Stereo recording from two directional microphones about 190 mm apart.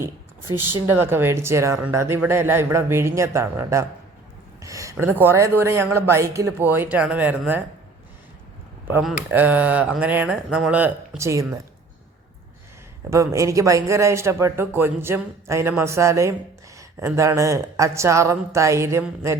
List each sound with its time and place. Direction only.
0.0 s speech: 10° right (ahead or behind)
8.9 s speech: 5° right (ahead or behind)
13.1 s speech: 15° right (ahead or behind)